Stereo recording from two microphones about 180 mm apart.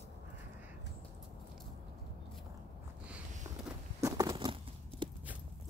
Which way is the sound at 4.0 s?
20° right (ahead or behind).